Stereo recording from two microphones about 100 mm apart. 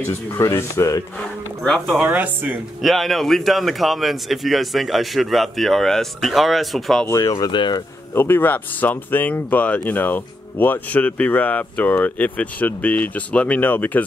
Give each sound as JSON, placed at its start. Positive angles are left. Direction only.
{"t": 0.0, "sound": "speech", "side_deg": 25}
{"t": 1.1, "sound": "a sound", "side_deg": 5}
{"t": 2.0, "sound": "speech", "side_deg": -15}
{"t": 2.8, "sound": "speech", "side_deg": 0}
{"t": 7.1, "sound": "speech", "side_deg": 30}
{"t": 7.5, "sound": "speech", "side_deg": 50}
{"t": 8.1, "sound": "speech", "side_deg": 20}